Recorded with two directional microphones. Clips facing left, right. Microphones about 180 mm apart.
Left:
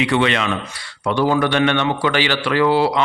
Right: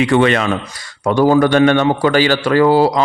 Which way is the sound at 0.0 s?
45° right (ahead or behind).